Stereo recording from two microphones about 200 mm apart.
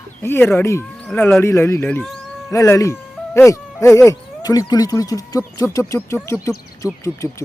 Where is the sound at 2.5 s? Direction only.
15° left (ahead or behind).